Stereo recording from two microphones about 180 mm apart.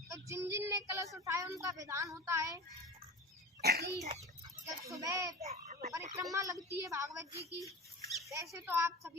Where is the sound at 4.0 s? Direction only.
40° right (ahead or behind).